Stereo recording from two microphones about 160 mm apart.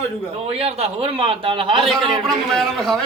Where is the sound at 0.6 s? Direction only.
40° right (ahead or behind).